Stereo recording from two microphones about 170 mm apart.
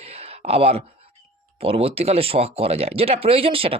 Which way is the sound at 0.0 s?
35° right (ahead or behind).